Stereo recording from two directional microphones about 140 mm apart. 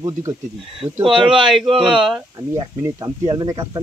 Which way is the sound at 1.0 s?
35° right (ahead or behind).